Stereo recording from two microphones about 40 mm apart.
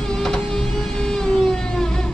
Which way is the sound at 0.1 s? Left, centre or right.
Centre.